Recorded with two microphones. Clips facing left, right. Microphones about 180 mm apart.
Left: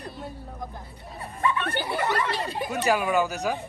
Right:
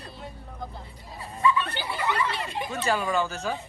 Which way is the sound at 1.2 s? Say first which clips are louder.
Right 2 dB; 60° left (ahead or behind).